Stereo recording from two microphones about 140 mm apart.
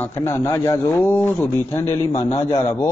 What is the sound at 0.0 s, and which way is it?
A man's voice, 15° left (ahead or behind).